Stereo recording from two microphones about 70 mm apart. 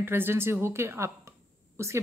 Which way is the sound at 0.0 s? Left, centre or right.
Right.